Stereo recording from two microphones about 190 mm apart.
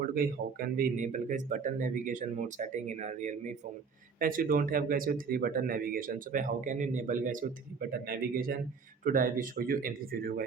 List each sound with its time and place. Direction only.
0.0 s speech: 50° right (ahead or behind)